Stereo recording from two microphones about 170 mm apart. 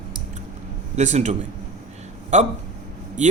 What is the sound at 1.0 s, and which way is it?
Speech, 45° right (ahead or behind).